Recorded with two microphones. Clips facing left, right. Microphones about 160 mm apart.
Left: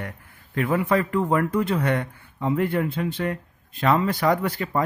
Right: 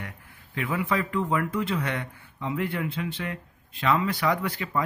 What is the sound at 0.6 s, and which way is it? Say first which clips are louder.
Speech: left 6 dB; 45° left (ahead or behind).